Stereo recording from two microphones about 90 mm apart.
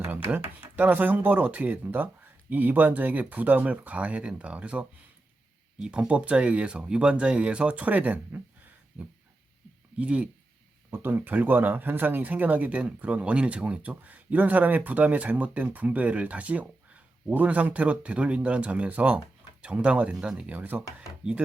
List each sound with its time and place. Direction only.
0.0 s a sound: 20° right (ahead or behind)
0.8 s speech: 20° right (ahead or behind)
10.0 s speech: 15° right (ahead or behind)
20.5 s speech: 20° right (ahead or behind)